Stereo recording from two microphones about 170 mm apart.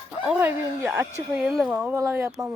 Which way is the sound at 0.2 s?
10° right (ahead or behind).